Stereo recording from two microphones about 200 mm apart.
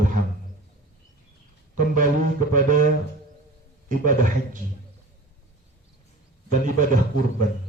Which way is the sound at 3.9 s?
40° right (ahead or behind).